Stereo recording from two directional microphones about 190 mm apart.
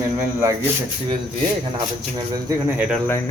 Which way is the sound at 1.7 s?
20° right (ahead or behind).